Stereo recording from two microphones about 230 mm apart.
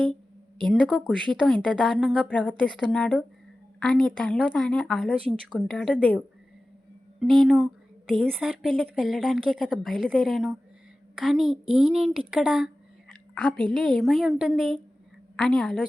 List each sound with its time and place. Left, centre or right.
0.7 s a woman's voice: centre
7.2 s a woman's voice: centre